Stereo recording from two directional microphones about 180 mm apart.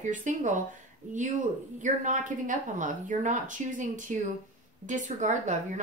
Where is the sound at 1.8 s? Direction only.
45° right (ahead or behind).